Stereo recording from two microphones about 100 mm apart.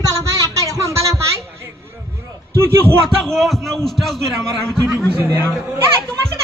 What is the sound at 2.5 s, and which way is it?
Speech, 25° right (ahead or behind).